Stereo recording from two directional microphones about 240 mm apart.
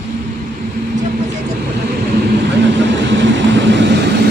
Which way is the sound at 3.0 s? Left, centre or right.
Right.